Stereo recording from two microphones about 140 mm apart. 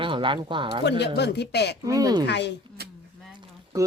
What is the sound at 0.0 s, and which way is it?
Speech, 35° right (ahead or behind).